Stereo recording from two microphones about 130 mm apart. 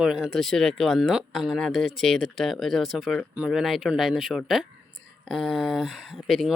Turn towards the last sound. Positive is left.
turn(degrees=0)  # may be behind; listen again after turning